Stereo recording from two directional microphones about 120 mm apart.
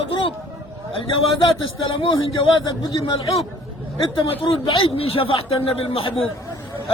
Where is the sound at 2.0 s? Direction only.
40° left (ahead or behind).